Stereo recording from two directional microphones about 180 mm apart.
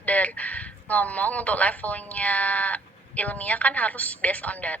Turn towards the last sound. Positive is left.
turn(degrees=10)  # may be behind; listen again after turning